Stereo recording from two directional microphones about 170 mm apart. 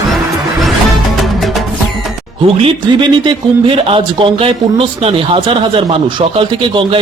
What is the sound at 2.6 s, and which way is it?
A man's voice, 30° right (ahead or behind).